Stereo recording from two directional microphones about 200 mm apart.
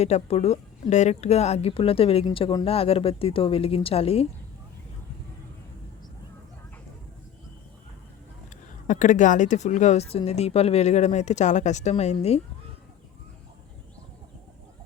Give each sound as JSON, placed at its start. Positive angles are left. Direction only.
{"t": 0.0, "sound": "speech", "side_deg": 30}
{"t": 8.9, "sound": "speech", "side_deg": 40}